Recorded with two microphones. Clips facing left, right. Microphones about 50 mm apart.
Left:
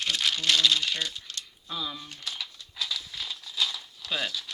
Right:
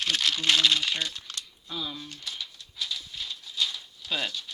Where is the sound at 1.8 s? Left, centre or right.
Left.